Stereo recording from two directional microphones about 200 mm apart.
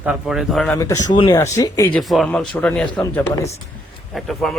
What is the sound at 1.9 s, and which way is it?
Speech, centre (ahead or behind).